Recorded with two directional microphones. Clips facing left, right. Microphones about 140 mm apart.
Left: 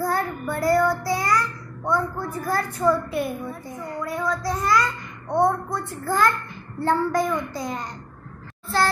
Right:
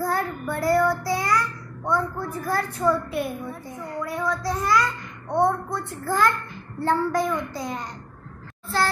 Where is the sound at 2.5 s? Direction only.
Centre (ahead or behind).